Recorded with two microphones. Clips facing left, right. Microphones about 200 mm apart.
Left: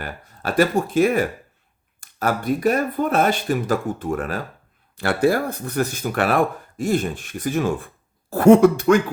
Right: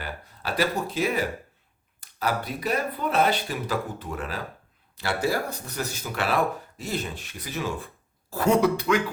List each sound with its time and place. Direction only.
0.0 s speech: 50° left (ahead or behind)